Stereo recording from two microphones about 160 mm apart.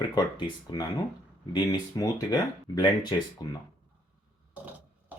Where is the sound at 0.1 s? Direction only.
30° left (ahead or behind).